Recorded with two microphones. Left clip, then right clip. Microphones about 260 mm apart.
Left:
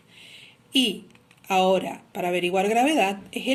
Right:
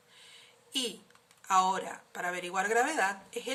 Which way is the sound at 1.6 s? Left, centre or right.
Right.